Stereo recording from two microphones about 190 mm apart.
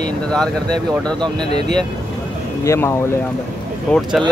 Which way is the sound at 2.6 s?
15° left (ahead or behind).